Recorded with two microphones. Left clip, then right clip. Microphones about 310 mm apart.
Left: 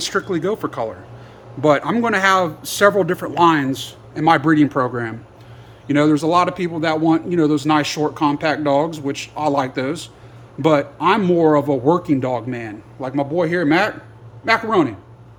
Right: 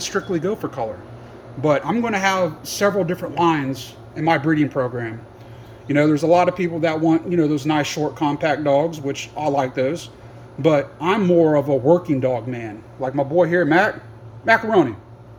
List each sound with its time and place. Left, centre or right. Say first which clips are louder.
0.1 s speech: even; centre
1.6 s speech: left 3 dB; centre
6.1 s speech: right 1 dB; centre
8.9 s speech: left 1 dB; centre
9.6 s speech: right 1 dB; centre